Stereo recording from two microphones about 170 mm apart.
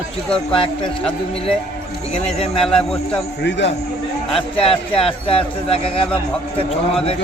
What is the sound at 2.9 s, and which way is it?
Speech, 5° left (ahead or behind).